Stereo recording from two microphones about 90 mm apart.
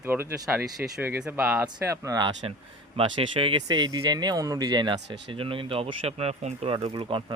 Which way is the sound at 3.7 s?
50° right (ahead or behind).